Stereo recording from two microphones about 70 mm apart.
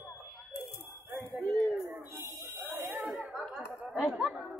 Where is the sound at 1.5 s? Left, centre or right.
Centre.